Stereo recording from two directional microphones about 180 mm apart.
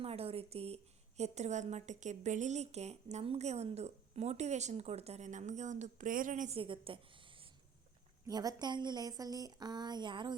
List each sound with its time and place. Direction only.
0.0 s a woman's voice: 35° right (ahead or behind)
6.6 s a woman's voice: 30° right (ahead or behind)
8.3 s a woman's voice: 20° right (ahead or behind)